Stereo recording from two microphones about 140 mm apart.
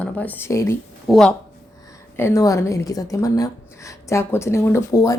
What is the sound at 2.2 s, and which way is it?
A woman's voice, 20° left (ahead or behind).